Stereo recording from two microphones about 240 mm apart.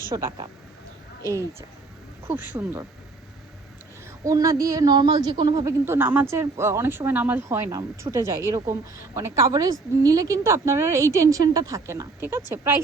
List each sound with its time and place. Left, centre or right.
0.1 s a woman's voice: centre
4.2 s a woman's voice: centre